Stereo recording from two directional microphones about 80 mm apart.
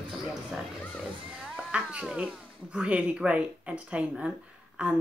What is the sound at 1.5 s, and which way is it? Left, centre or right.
Speech, centre.